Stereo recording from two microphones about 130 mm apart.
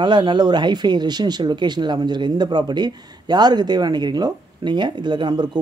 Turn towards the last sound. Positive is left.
turn(degrees=-35)  # may be behind; listen again after turning